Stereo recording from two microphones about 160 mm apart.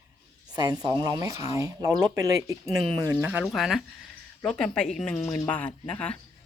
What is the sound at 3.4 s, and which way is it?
Speech, centre (ahead or behind).